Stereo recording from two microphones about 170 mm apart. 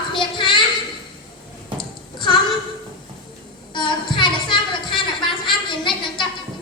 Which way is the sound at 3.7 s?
30° left (ahead or behind).